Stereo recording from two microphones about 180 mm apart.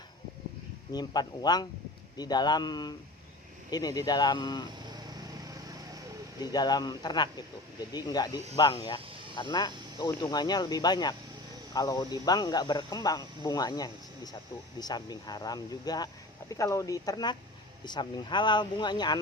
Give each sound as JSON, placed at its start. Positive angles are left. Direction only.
{"t": 0.9, "sound": "speech", "side_deg": 20}
{"t": 4.9, "sound": "vehicle", "side_deg": -20}
{"t": 6.4, "sound": "speech", "side_deg": 20}